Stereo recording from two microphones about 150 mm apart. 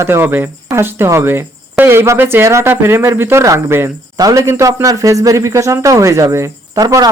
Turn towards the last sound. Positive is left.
turn(degrees=-25)  # may be behind; listen again after turning